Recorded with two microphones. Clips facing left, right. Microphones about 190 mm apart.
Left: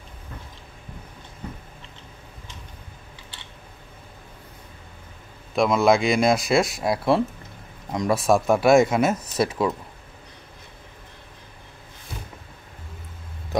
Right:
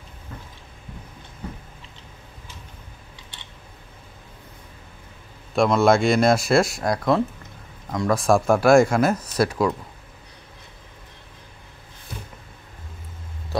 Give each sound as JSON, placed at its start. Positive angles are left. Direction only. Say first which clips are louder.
{"t": 5.6, "sound": "speech", "louder": "right 1 dB", "side_deg": 0}